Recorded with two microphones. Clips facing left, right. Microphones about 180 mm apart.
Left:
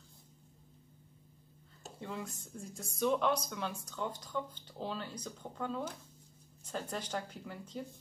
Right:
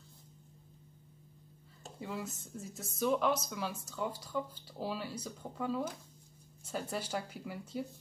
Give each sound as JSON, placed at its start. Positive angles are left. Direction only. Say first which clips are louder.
{"t": 1.8, "sound": "speech", "louder": "right 1 dB", "side_deg": -5}